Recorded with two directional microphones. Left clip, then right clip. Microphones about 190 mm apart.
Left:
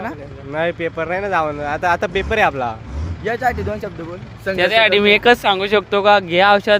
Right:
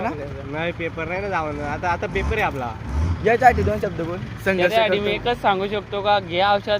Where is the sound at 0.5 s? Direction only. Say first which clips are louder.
Left 7 dB; 50° left (ahead or behind).